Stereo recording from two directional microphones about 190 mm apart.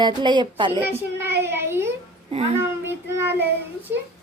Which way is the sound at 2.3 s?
30° right (ahead or behind).